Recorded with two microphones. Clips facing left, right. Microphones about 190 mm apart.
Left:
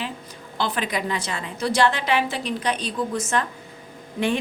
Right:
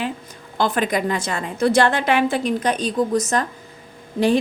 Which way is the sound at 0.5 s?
50° right (ahead or behind).